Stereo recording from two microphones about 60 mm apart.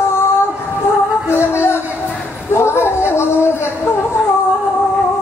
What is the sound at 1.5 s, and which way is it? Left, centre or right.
Music, left.